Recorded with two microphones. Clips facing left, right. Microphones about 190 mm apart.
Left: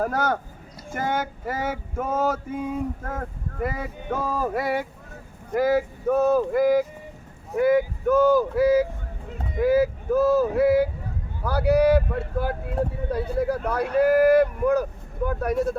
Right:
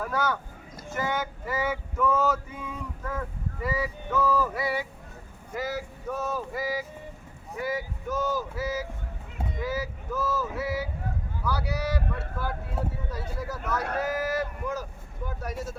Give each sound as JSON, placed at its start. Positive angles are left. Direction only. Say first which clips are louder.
{"t": 0.0, "sound": "male singing", "louder": "left 4 dB", "side_deg": 50}
{"t": 5.5, "sound": "speech", "louder": "left 11 dB", "side_deg": 55}